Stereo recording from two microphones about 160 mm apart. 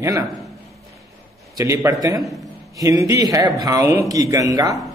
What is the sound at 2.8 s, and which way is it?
A man's voice, 20° right (ahead or behind).